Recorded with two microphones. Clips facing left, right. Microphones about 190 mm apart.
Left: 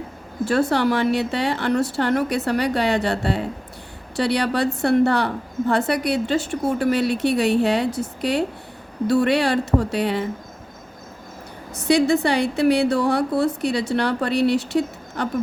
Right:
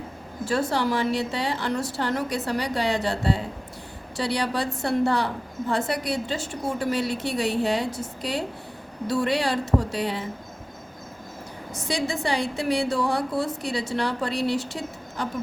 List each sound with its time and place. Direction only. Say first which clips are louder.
0.4 s a woman's voice: left 5 dB; 65° left (ahead or behind)
11.7 s a woman's voice: left 10 dB; 65° left (ahead or behind)